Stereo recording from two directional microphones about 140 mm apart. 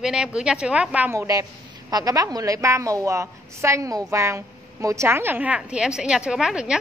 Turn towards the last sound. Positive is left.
turn(degrees=-5)  # may be behind; listen again after turning